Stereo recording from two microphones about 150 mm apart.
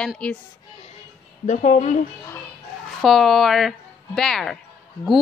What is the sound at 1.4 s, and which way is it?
Speech, 50° left (ahead or behind).